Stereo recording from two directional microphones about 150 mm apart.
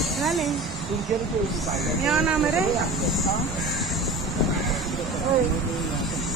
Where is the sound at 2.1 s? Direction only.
5° right (ahead or behind).